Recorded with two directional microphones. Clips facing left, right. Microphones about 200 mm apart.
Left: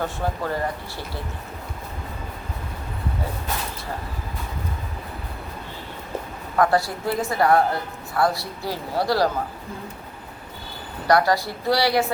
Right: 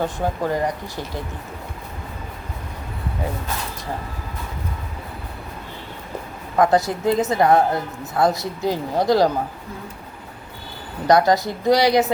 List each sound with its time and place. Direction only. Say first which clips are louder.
0.0 s speech: right 3 dB; 15° right (ahead or behind)
6.6 s a woman's voice: right 3 dB; 20° right (ahead or behind)
11.1 s a woman's voice: right 3 dB; 20° right (ahead or behind)